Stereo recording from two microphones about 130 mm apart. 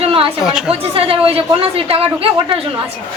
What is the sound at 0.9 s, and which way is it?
A woman's voice, 45° right (ahead or behind).